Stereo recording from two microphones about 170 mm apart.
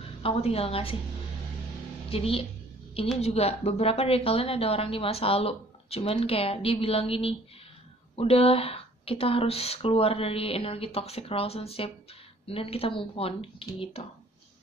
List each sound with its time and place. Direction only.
0.2 s speech: 35° left (ahead or behind)
2.0 s a woman's voice: 35° left (ahead or behind)